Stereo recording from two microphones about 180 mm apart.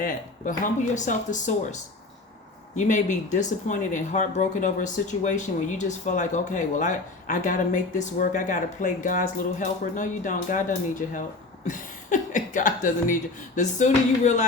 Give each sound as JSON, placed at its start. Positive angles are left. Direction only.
{"t": 0.0, "sound": "speech", "side_deg": 45}